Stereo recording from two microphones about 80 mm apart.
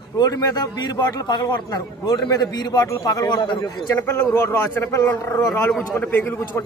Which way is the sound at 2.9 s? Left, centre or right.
Left.